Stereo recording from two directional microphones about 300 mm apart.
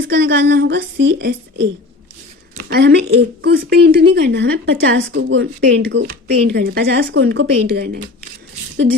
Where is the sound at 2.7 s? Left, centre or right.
Right.